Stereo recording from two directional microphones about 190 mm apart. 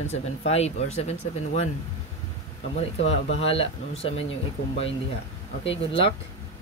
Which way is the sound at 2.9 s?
35° left (ahead or behind).